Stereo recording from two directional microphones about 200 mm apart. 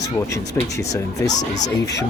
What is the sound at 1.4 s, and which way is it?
Speech, 35° left (ahead or behind).